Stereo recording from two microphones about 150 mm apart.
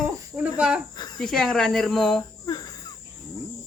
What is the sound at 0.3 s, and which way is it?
Cricket, 10° right (ahead or behind).